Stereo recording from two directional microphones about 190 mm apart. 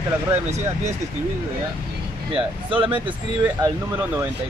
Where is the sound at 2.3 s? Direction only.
30° right (ahead or behind).